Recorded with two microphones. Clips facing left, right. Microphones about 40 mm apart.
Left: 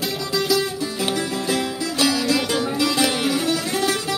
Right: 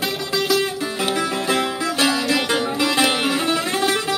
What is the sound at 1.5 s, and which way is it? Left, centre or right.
Music, right.